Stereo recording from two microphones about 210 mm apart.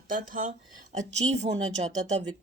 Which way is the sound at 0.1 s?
40° right (ahead or behind).